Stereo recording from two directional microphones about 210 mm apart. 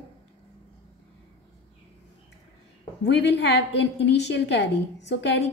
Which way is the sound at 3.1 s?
55° left (ahead or behind).